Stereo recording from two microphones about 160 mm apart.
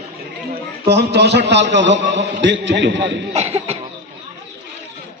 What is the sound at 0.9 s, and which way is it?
A man's voice, 90° right.